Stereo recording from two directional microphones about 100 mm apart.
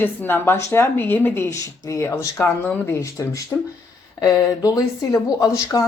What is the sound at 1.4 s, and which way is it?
Speech, 30° left (ahead or behind).